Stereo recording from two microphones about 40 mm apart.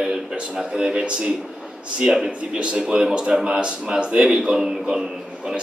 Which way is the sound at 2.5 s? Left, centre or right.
Right.